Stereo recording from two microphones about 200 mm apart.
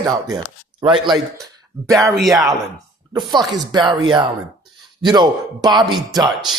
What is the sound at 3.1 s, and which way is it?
Speech, 20° right (ahead or behind).